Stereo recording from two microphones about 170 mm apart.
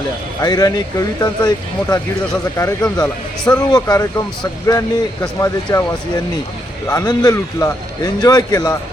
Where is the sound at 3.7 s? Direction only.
20° left (ahead or behind).